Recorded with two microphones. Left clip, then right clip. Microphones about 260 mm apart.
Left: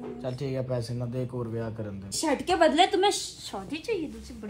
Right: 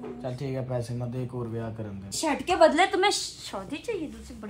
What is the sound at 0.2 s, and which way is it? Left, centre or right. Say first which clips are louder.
Speech: left 2 dB; centre.